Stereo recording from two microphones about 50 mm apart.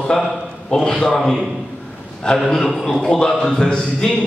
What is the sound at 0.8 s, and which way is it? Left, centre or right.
Speech, centre.